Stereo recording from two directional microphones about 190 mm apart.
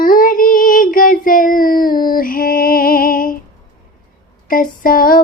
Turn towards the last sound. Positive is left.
turn(degrees=50)  # may be behind; listen again after turning